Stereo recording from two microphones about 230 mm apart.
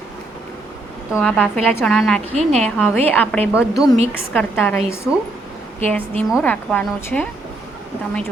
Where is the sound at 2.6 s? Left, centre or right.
Centre.